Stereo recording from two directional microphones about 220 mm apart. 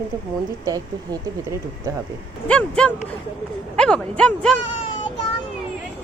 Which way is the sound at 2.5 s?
5° left (ahead or behind).